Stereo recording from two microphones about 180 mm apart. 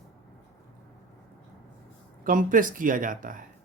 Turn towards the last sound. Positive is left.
turn(degrees=-50)  # may be behind; listen again after turning